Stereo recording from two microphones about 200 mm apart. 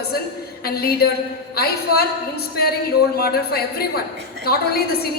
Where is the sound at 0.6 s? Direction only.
50° left (ahead or behind).